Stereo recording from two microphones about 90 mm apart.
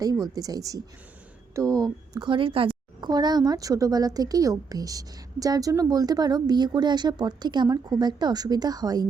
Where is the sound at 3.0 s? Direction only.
50° right (ahead or behind).